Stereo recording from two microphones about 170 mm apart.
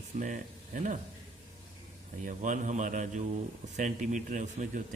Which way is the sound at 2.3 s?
50° right (ahead or behind).